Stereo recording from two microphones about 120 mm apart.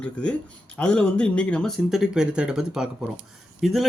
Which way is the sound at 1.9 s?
5° right (ahead or behind).